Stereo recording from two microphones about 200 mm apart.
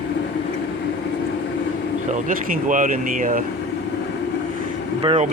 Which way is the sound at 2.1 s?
40° right (ahead or behind).